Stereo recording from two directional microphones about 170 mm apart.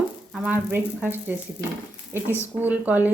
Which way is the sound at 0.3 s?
5° right (ahead or behind).